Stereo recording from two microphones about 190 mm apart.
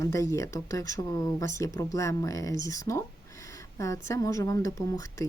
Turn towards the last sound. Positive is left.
turn(degrees=15)  # may be behind; listen again after turning